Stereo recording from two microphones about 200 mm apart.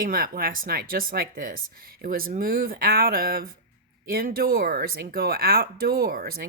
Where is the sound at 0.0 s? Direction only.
45° right (ahead or behind).